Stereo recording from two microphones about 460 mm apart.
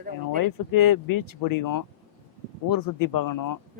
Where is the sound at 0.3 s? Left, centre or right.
Left.